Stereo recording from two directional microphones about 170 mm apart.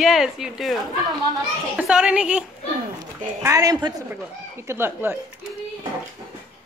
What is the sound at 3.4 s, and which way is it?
A woman's voice, 20° right (ahead or behind).